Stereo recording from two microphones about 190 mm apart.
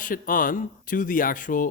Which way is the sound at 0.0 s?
45° left (ahead or behind).